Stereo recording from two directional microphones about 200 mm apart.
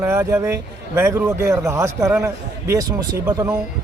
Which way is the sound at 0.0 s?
15° right (ahead or behind).